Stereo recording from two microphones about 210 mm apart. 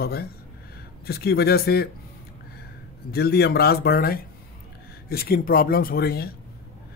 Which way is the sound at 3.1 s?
50° left (ahead or behind).